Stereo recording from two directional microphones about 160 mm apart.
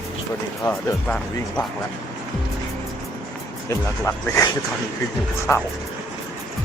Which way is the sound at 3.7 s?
20° left (ahead or behind).